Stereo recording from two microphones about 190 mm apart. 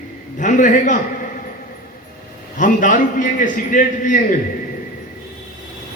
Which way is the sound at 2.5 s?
45° left (ahead or behind).